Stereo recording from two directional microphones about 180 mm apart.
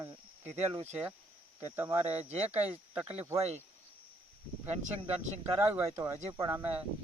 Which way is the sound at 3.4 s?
35° right (ahead or behind).